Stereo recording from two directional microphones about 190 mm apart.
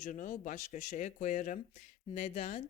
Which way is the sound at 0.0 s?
40° left (ahead or behind).